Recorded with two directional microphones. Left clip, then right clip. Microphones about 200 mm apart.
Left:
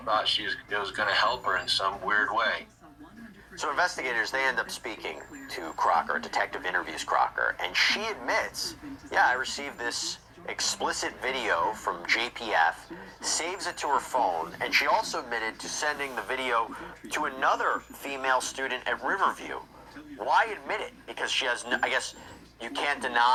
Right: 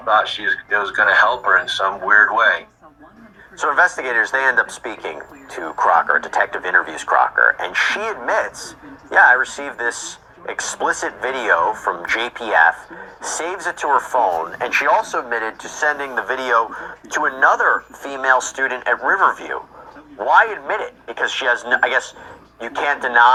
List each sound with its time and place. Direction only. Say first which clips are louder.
0.0 s speech: right 10 dB; 30° right (ahead or behind)